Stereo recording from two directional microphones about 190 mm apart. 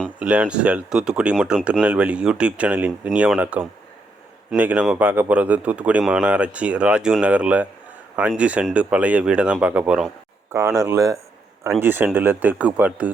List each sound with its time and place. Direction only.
0.2 s a man's voice: 5° right (ahead or behind)